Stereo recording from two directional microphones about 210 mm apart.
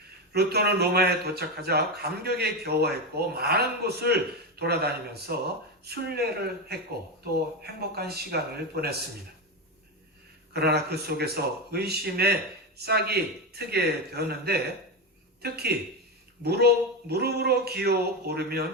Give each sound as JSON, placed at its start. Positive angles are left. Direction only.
{"t": 0.3, "sound": "a man's voice", "side_deg": -50}
{"t": 10.5, "sound": "a man's voice", "side_deg": -50}